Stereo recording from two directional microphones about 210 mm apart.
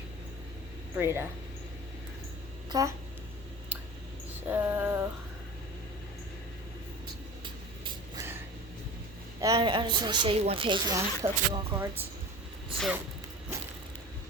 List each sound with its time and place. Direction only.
0.9 s a sound: 10° right (ahead or behind)
2.6 s speech: 15° right (ahead or behind)
4.4 s a sound: 10° right (ahead or behind)
7.4 s vehicle: 20° right (ahead or behind)
9.4 s a woman's voice: 20° right (ahead or behind)
12.7 s speech: centre (ahead or behind)